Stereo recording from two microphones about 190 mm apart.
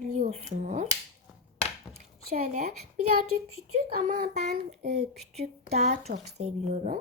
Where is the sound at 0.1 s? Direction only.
40° right (ahead or behind).